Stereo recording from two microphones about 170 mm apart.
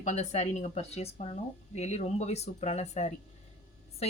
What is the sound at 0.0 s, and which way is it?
Speech, 40° left (ahead or behind).